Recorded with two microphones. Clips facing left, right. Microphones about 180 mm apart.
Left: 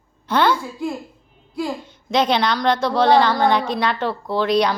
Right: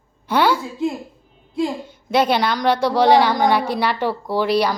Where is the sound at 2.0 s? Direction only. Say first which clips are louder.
Right 1 dB; 10° right (ahead or behind).